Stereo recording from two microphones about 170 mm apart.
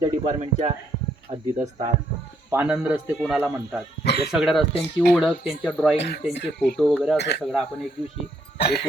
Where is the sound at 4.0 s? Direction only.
70° left (ahead or behind).